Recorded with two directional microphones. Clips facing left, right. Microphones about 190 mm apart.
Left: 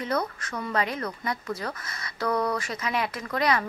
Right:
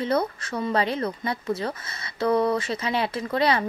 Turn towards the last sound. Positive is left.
turn(degrees=-30)  # may be behind; listen again after turning